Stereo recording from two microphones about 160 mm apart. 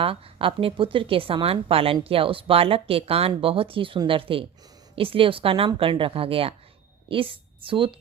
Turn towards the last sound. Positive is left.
turn(degrees=-30)  # may be behind; listen again after turning